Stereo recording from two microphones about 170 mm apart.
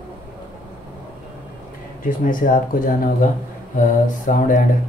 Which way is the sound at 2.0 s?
55° left (ahead or behind).